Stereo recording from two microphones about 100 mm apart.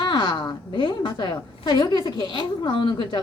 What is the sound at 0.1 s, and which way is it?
A woman's voice, 50° left (ahead or behind).